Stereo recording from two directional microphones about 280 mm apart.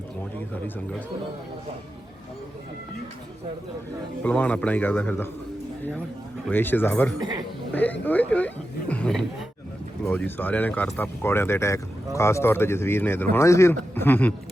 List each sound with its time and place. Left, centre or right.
4.2 s speech: centre
6.5 s speech: centre
7.2 s speech: centre
7.7 s speech: centre